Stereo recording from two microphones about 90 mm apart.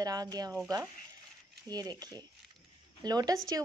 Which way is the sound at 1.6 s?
50° right (ahead or behind).